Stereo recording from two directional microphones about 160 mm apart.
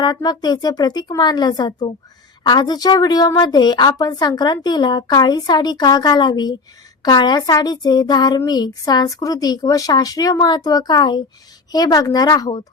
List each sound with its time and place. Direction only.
0.0 s speech: 25° left (ahead or behind)